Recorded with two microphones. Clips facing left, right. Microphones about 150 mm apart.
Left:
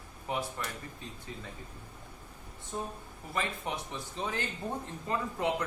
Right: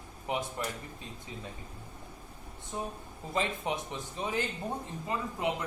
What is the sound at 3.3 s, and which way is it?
A man's voice, 15° right (ahead or behind).